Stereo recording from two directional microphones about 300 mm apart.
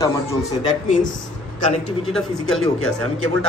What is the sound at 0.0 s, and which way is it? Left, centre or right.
Speech, centre.